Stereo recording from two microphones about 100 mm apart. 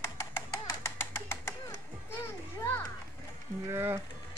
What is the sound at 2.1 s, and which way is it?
Children playing, 25° left (ahead or behind).